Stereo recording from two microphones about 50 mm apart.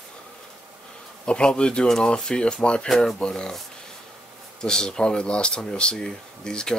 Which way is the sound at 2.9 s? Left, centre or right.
Centre.